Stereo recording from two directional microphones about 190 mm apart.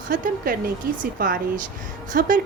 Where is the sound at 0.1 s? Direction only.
50° right (ahead or behind).